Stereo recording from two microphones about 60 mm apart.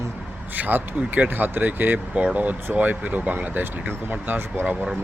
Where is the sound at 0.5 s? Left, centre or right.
Right.